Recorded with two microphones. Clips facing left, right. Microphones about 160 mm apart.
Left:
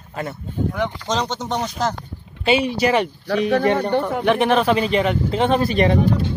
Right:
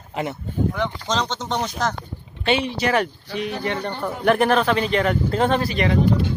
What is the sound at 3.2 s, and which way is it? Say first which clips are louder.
Speech: left 9 dB; 75° left (ahead or behind).